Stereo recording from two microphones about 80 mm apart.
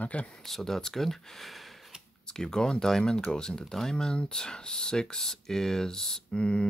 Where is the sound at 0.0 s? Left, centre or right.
Centre.